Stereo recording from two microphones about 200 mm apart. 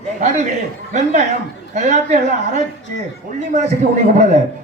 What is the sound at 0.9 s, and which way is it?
A man's voice, 35° right (ahead or behind).